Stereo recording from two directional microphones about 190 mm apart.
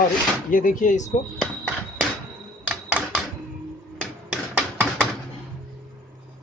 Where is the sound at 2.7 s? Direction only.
10° right (ahead or behind).